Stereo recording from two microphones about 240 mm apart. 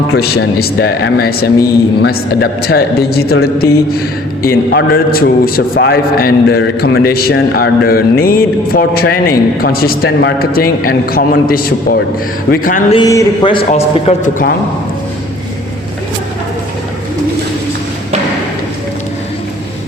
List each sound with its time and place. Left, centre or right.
0.6 s a man's voice: left
12.9 s a man's voice: centre; by 14.5 s left